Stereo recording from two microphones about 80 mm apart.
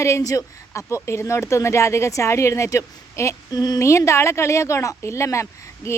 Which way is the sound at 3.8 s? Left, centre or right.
Left.